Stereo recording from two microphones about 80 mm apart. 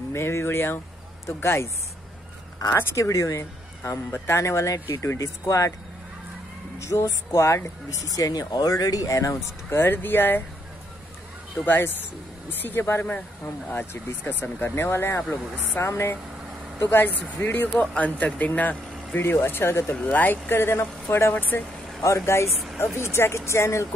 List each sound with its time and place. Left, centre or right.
0.1 s speech: left
2.7 s speech: left
3.1 s speech: left
6.8 s speech: left
9.7 s speech: left
11.6 s speech: left
17.4 s speech: left
22.0 s speech: left